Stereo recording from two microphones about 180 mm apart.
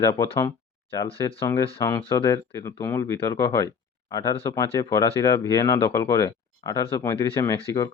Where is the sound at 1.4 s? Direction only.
20° left (ahead or behind).